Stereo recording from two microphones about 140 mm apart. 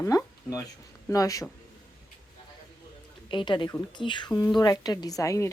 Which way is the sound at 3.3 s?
35° left (ahead or behind).